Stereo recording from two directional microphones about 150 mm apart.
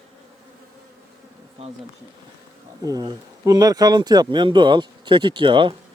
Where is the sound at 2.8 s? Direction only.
25° right (ahead or behind).